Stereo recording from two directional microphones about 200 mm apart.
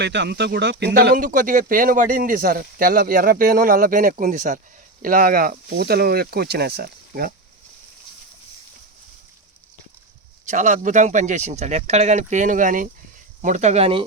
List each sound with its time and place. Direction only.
0.0 s speech: 60° right (ahead or behind)
10.4 s speech: 35° right (ahead or behind)